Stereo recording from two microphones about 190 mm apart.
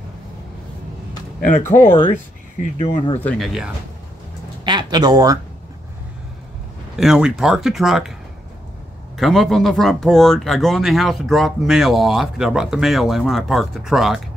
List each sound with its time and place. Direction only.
1.4 s speech: 40° left (ahead or behind)
2.8 s speech: 30° left (ahead or behind)
3.2 s speech: 5° left (ahead or behind)
4.6 s speech: 20° right (ahead or behind)
7.0 s speech: 5° right (ahead or behind)
9.1 s speech: centre (ahead or behind)